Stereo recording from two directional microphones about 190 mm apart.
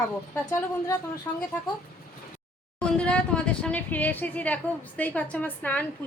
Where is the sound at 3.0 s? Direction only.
5° left (ahead or behind).